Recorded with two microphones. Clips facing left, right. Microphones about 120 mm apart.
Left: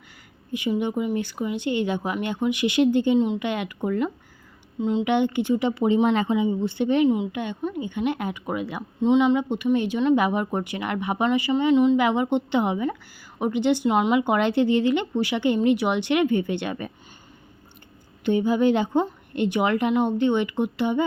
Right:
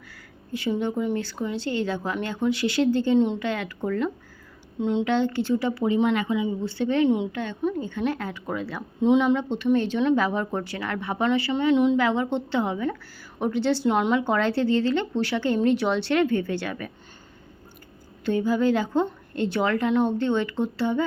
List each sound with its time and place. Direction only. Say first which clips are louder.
0.8 s speech: even; 15° left (ahead or behind)
3.2 s speech: even; 5° left (ahead or behind)
3.4 s speech: left 1 dB; 20° left (ahead or behind)
4.8 s speech: even; centre (ahead or behind)
5.0 s a woman's voice: left 2 dB; 15° left (ahead or behind)
9.0 s speech: left 1 dB; centre (ahead or behind)
9.4 s speech: even; 10° left (ahead or behind)
11.6 s speech: left 2 dB; centre (ahead or behind)
11.9 s speech: left 2 dB; 15° left (ahead or behind)
13.8 s speech: left 1 dB; 5° left (ahead or behind); by 16.9 s 20° left (ahead or behind)
18.3 s a woman's voice: left 2 dB; 20° left (ahead or behind)